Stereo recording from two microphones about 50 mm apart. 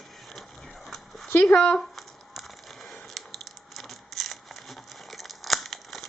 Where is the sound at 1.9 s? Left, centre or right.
Centre.